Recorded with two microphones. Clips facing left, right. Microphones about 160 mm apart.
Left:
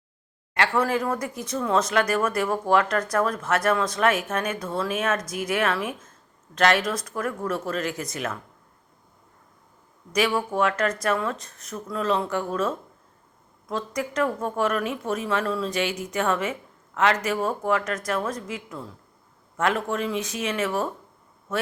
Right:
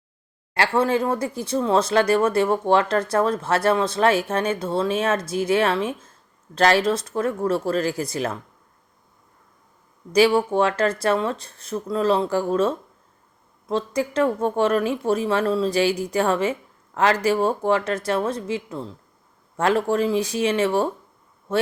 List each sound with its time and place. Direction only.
0.5 s speech: 30° right (ahead or behind)
10.1 s speech: 30° right (ahead or behind)